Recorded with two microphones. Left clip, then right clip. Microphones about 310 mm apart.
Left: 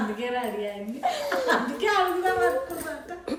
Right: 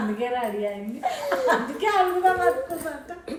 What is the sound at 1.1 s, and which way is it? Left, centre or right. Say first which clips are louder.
A child's voice: right 2 dB; right.